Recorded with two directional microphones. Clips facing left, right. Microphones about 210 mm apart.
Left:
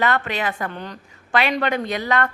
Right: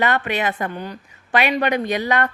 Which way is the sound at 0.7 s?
10° right (ahead or behind).